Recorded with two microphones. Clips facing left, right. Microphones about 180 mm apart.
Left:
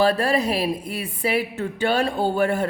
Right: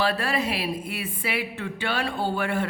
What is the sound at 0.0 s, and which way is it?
A woman's voice, 40° left (ahead or behind).